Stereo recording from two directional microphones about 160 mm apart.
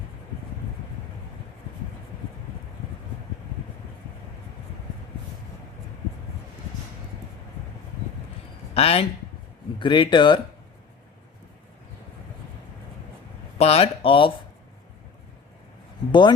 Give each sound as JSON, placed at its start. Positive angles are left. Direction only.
{"t": 8.7, "sound": "speech", "side_deg": 40}
{"t": 13.6, "sound": "speech", "side_deg": 40}